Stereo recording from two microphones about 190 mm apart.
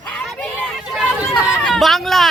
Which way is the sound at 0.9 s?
Centre (ahead or behind).